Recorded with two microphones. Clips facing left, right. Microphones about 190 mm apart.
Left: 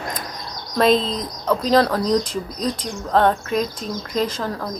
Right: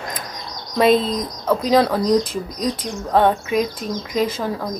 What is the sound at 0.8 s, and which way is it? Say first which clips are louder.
Speech: right 2 dB; 5° right (ahead or behind).